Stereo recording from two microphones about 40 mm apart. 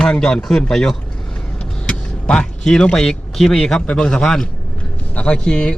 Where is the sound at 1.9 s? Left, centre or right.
Left.